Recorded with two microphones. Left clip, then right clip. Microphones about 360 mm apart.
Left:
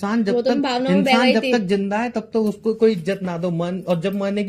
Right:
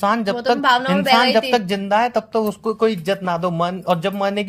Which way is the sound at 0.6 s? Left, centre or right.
Right.